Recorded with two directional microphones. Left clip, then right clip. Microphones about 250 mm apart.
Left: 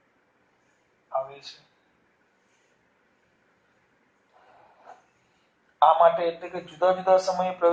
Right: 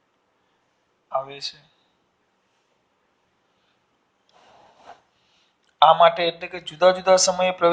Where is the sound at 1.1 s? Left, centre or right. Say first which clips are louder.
Right 3 dB; right.